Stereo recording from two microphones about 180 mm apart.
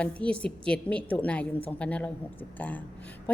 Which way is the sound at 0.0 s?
5° left (ahead or behind).